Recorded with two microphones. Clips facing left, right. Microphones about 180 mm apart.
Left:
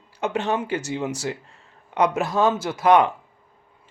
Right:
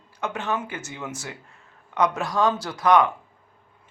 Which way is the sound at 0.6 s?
75° left (ahead or behind).